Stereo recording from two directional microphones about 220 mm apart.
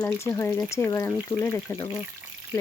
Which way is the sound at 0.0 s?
10° left (ahead or behind).